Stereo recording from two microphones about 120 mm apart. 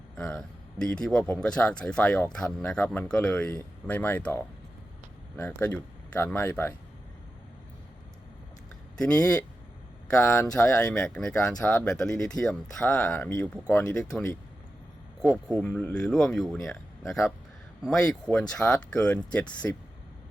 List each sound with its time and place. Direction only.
0.2 s speech: 5° left (ahead or behind)
9.0 s speech: 10° left (ahead or behind)
10.4 s speech: 5° left (ahead or behind)
13.9 s speech: 10° left (ahead or behind)
16.6 s a sound: 25° left (ahead or behind)
17.8 s speech: 5° left (ahead or behind)